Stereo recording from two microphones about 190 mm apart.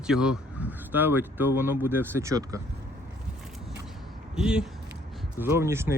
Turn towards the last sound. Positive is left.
turn(degrees=-15)  # may be behind; listen again after turning